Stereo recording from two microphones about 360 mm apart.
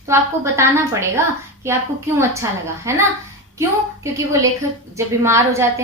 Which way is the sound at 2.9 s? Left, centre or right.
Centre.